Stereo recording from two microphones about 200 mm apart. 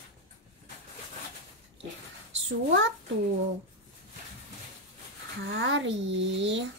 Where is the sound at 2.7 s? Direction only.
70° right (ahead or behind).